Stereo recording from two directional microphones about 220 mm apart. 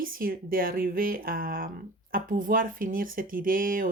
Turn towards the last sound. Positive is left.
turn(degrees=-40)  # may be behind; listen again after turning